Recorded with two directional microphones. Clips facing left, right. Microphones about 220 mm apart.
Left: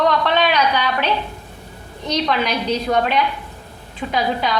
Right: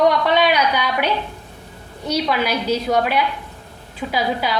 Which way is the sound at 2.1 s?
10° right (ahead or behind).